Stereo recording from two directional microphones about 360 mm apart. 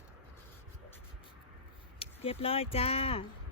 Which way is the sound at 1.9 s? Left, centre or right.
Centre.